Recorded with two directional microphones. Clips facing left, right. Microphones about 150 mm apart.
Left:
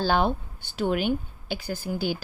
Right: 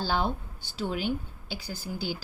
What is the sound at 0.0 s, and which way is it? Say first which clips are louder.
A woman's voice: left 5 dB; 65° left (ahead or behind).